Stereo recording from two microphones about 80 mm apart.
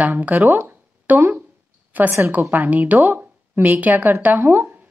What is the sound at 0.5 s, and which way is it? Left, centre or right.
Speech, right.